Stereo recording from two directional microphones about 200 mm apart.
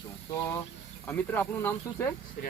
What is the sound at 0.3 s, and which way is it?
Speech, 15° left (ahead or behind).